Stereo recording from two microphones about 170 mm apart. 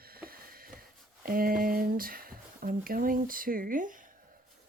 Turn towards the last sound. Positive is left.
turn(degrees=-50)  # may be behind; listen again after turning